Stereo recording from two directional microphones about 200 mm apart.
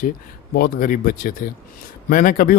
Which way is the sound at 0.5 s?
45° left (ahead or behind).